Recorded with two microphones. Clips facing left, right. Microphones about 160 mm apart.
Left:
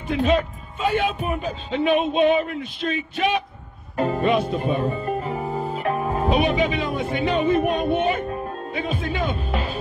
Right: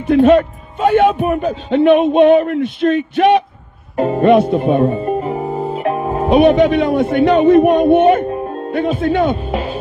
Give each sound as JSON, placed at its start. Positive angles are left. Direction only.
{"t": 0.0, "sound": "speech", "side_deg": -60}
{"t": 3.9, "sound": "music", "side_deg": -30}
{"t": 4.2, "sound": "speech", "side_deg": -60}
{"t": 4.8, "sound": "music", "side_deg": -30}
{"t": 6.2, "sound": "speech", "side_deg": -60}
{"t": 9.5, "sound": "speech", "side_deg": -30}